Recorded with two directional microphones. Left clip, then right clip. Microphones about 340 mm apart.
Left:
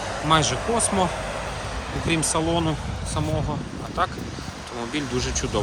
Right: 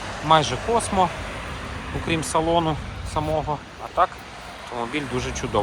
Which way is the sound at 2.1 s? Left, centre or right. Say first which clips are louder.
Right 2 dB; centre.